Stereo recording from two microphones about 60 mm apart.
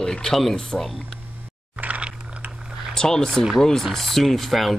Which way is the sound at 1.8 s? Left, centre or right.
Right.